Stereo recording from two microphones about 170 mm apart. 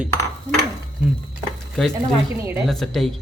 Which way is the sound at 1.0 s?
5° right (ahead or behind).